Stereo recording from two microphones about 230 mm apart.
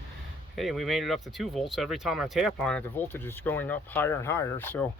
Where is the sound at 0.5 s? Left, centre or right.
Centre.